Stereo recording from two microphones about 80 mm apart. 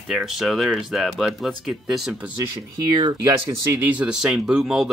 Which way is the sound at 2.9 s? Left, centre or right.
Right.